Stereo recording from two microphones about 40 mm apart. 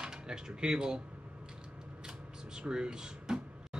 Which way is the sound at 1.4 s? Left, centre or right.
Right.